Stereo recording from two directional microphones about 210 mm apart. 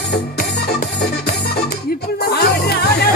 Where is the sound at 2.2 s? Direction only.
50° left (ahead or behind).